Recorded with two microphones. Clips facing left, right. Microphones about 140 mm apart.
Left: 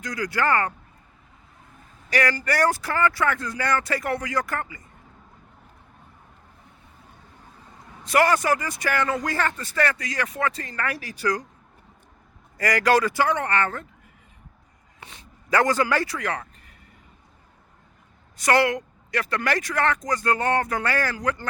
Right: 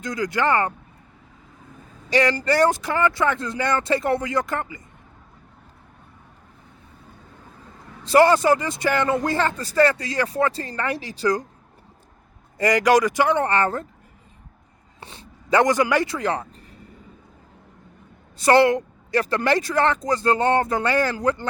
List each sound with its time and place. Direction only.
0.0 s speech: 25° right (ahead or behind)
2.0 s speech: 25° right (ahead or behind)
8.0 s speech: 30° right (ahead or behind)
12.5 s speech: 20° right (ahead or behind)
13.4 s speech: 35° right (ahead or behind)
15.0 s speech: 30° right (ahead or behind)
18.3 s speech: 30° right (ahead or behind)